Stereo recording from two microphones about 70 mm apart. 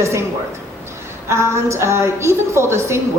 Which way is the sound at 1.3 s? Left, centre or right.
Right.